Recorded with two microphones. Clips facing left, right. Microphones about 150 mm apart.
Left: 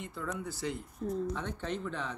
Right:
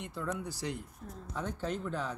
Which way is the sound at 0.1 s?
15° right (ahead or behind).